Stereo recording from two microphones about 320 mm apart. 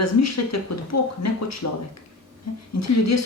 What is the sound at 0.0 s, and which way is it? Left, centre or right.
Speech, left.